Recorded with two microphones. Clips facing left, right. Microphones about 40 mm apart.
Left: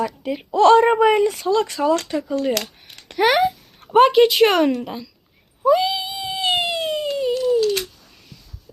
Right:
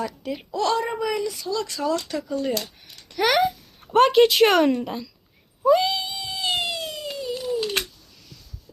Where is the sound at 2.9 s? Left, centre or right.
Left.